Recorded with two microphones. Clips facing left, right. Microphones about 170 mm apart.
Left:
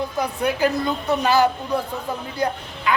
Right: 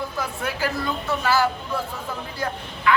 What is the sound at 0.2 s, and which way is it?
A man's voice, 20° left (ahead or behind).